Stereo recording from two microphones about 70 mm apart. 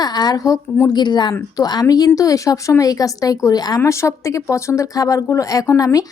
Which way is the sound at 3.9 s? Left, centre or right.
Left.